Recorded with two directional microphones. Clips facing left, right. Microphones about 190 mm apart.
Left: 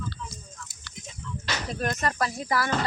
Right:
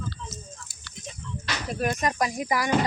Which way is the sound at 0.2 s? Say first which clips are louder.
Right 1 dB; 25° right (ahead or behind).